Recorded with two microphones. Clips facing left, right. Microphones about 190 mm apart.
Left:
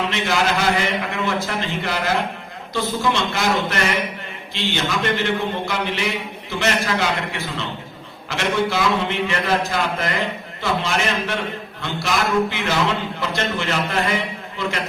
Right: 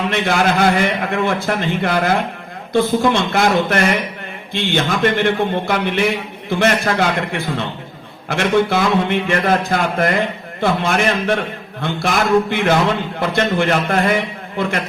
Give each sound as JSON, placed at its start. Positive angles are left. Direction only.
{"t": 0.1, "sound": "a man's voice", "side_deg": -55}